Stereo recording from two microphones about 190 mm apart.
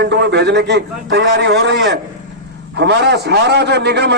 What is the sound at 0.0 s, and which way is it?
A man's voice, 65° right (ahead or behind).